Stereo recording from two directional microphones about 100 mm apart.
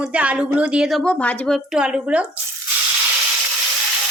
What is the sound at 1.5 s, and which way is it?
Speech, 10° right (ahead or behind).